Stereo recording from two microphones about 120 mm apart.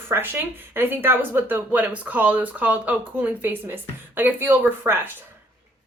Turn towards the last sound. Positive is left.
turn(degrees=-20)  # may be behind; listen again after turning